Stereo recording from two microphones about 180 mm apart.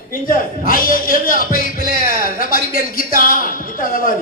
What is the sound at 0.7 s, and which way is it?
Speech, 50° left (ahead or behind).